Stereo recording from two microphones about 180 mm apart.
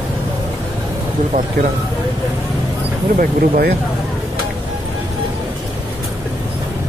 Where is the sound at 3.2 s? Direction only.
55° right (ahead or behind).